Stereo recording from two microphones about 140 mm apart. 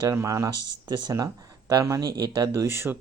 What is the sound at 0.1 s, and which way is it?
Speech, 20° right (ahead or behind).